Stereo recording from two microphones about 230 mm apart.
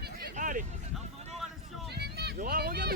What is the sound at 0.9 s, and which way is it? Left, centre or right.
Music, centre.